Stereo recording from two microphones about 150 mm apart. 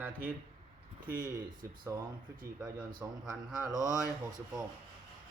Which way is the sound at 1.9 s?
15° right (ahead or behind).